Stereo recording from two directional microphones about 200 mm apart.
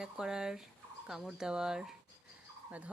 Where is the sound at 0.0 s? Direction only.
5° right (ahead or behind).